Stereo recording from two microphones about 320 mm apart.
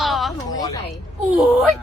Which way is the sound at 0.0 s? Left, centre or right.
Centre.